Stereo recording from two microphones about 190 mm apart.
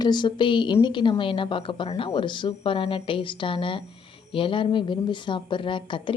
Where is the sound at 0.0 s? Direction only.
25° left (ahead or behind).